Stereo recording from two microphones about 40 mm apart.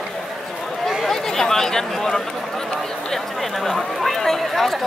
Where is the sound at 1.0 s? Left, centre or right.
Centre.